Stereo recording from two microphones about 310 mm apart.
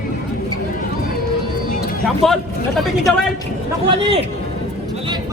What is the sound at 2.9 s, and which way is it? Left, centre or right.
Speech, centre.